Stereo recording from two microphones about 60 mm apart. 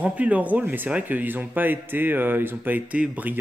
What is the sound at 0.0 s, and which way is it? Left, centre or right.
Speech, right.